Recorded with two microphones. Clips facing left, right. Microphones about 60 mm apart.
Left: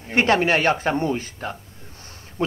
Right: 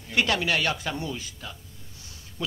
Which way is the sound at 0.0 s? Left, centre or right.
Left.